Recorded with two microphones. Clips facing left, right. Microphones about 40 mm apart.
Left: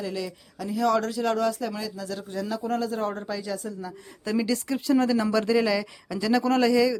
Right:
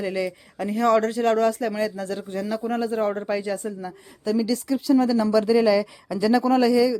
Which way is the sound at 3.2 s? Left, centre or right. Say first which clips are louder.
Right 5 dB; right.